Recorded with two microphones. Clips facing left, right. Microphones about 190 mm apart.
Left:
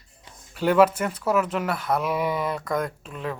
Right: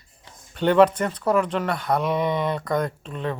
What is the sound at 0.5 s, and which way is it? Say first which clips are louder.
Speech: right 2 dB; 5° left (ahead or behind).